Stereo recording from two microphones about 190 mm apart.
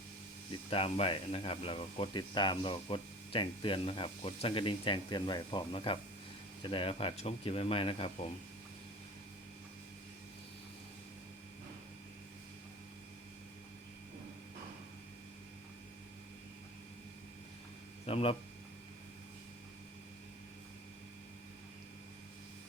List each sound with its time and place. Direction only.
0.5 s speech: 30° left (ahead or behind)
18.0 s speech: 30° left (ahead or behind)